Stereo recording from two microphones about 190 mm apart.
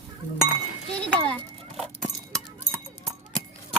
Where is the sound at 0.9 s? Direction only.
5° left (ahead or behind).